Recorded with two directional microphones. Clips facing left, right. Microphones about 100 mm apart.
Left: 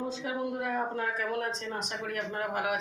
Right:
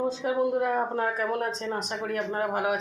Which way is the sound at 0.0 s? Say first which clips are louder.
Right 7 dB; 40° right (ahead or behind).